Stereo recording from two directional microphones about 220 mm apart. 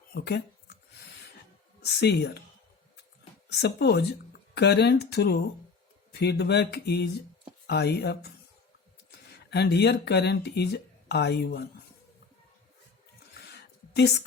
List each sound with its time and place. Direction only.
0.1 s speech: 45° left (ahead or behind)
1.8 s speech: 50° left (ahead or behind)
3.5 s speech: 50° left (ahead or behind)
9.5 s speech: 50° left (ahead or behind)
13.5 s a sound: 50° left (ahead or behind)